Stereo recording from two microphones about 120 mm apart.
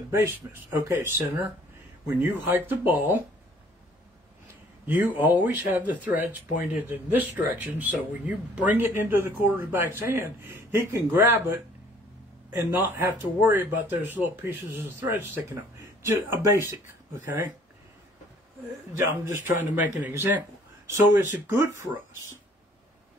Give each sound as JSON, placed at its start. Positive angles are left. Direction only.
{"t": 0.2, "sound": "speech", "side_deg": -20}
{"t": 4.8, "sound": "speech", "side_deg": -15}
{"t": 19.0, "sound": "speech", "side_deg": -20}